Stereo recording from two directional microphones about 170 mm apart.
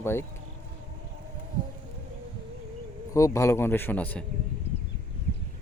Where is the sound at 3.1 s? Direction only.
15° left (ahead or behind).